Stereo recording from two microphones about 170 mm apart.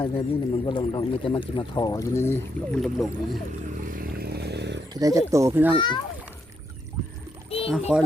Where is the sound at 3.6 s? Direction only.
50° right (ahead or behind); by 4.8 s 80° right.